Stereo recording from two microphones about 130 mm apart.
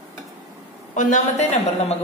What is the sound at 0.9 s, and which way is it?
Speech, 65° left (ahead or behind).